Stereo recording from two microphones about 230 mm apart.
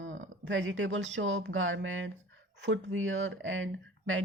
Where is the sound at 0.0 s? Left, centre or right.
Right.